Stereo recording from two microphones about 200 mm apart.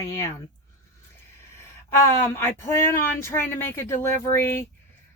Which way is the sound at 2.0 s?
10° left (ahead or behind).